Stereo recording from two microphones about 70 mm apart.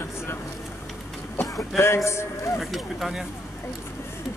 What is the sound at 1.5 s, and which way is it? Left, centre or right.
Speech, left.